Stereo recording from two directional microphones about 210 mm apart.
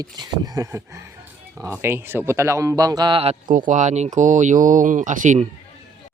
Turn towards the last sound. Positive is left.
turn(degrees=-35)  # may be behind; listen again after turning